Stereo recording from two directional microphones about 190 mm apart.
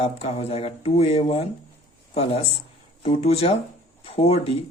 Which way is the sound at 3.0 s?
30° left (ahead or behind).